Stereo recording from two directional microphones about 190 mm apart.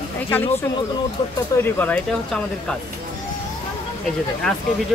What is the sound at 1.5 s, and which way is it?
Speech, 10° left (ahead or behind).